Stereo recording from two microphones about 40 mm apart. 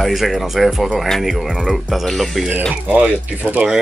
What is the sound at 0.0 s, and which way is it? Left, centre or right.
Speech, centre.